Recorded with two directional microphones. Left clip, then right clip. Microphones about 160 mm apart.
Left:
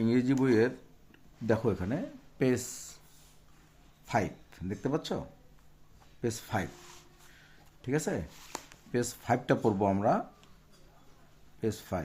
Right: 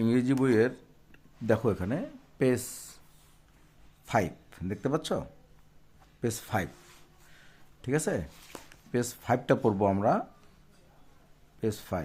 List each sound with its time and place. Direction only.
0.0 s speech: 20° right (ahead or behind)
4.0 s speech: 30° right (ahead or behind)
6.2 s speech: 30° right (ahead or behind)
7.3 s a sound: 30° right (ahead or behind)
8.9 s speech: 25° right (ahead or behind)
11.6 s speech: 20° right (ahead or behind)